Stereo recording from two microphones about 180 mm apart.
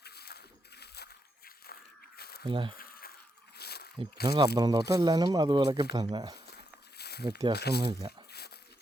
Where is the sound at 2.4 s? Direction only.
30° right (ahead or behind).